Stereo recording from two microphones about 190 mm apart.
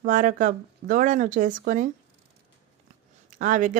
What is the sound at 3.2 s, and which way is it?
Speech, 45° right (ahead or behind).